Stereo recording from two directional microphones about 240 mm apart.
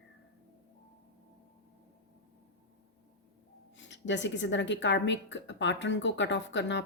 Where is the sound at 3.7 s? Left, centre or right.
Left.